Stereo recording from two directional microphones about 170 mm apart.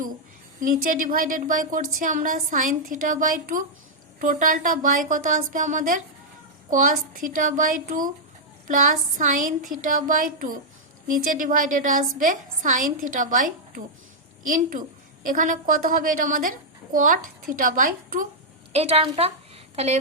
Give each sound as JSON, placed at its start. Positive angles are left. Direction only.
{"t": 0.6, "sound": "a woman's voice", "side_deg": -55}
{"t": 18.7, "sound": "a woman's voice", "side_deg": -35}